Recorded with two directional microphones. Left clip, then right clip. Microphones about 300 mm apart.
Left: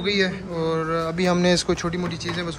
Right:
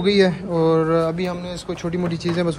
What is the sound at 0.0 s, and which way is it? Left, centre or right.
A man's voice, centre.